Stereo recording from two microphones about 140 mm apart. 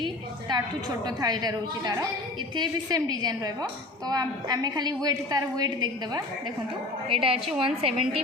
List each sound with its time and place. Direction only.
0.0 s a woman's voice: 30° right (ahead or behind)
7.1 s a woman's voice: 40° right (ahead or behind)